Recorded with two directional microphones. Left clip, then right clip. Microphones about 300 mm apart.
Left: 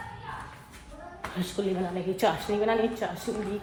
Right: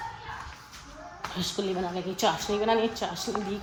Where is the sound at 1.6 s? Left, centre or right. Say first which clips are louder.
Left 2 dB; centre.